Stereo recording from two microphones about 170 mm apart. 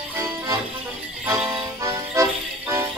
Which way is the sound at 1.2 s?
20° right (ahead or behind).